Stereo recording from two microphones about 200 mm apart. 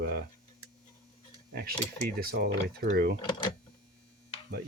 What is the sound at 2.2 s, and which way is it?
Speech, 55° right (ahead or behind).